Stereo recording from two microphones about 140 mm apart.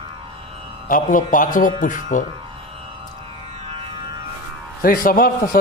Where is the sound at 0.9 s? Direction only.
70° left (ahead or behind).